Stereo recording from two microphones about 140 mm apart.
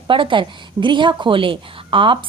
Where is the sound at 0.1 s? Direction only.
35° right (ahead or behind).